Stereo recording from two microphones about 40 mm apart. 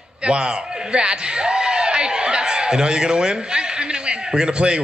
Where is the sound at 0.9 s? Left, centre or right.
Right.